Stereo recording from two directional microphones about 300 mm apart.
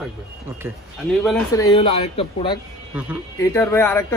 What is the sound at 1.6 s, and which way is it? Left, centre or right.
A man's voice, centre.